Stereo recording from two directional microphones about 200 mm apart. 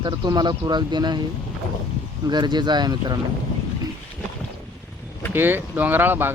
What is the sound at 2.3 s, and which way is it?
Speech, 20° right (ahead or behind).